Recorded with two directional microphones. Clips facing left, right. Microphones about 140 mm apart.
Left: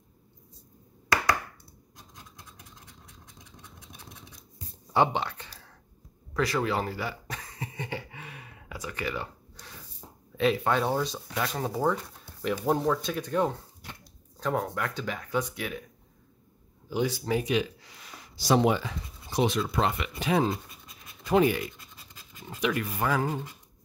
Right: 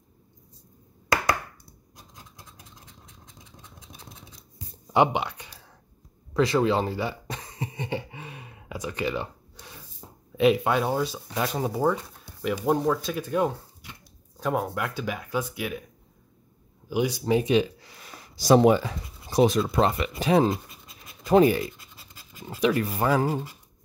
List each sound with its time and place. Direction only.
4.9 s speech: 15° right (ahead or behind)
6.3 s cough: 25° right (ahead or behind); by 11.1 s 5° right (ahead or behind)
11.2 s speech: 20° right (ahead or behind)
11.6 s speech: 10° right (ahead or behind)
16.9 s speech: 15° right (ahead or behind)
17.4 s speech: 30° right (ahead or behind)
18.0 s writing: 40° right (ahead or behind)
19.7 s speech: 35° right (ahead or behind)
21.9 s scratch: 5° right (ahead or behind)
22.6 s speech: 35° right (ahead or behind)